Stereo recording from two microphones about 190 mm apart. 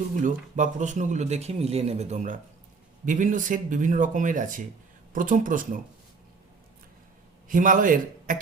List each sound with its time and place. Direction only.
0.2 s a man's voice: 40° right (ahead or behind)
7.4 s a man's voice: 45° right (ahead or behind)